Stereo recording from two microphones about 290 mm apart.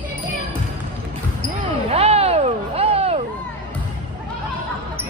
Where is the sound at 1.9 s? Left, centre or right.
Right.